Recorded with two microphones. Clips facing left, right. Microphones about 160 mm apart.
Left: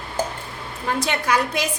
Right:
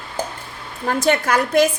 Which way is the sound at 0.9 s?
45° right (ahead or behind).